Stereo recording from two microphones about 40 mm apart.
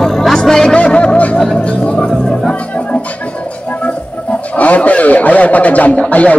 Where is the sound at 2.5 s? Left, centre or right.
Left.